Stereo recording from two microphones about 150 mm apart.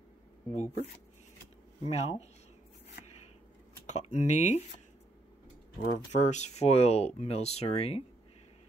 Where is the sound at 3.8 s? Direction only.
50° left (ahead or behind).